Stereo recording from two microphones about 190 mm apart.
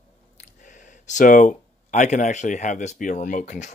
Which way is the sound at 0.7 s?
40° left (ahead or behind).